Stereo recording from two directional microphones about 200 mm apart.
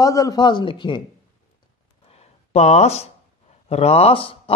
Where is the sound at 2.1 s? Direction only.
30° left (ahead or behind).